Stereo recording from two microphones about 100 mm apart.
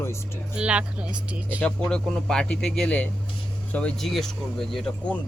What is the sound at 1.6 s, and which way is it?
Speech, 10° left (ahead or behind).